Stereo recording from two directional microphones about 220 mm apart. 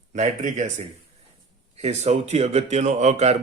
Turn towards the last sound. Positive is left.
turn(degrees=-30)  # may be behind; listen again after turning